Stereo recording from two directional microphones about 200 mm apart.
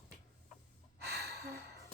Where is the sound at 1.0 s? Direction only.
55° right (ahead or behind).